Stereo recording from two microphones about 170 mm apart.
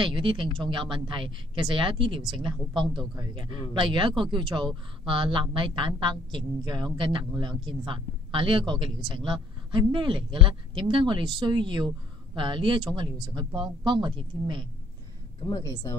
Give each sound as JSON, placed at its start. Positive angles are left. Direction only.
{"t": 0.0, "sound": "a woman's voice", "side_deg": -30}